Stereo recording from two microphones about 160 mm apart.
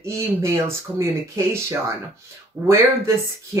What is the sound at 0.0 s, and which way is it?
Speech, 15° right (ahead or behind).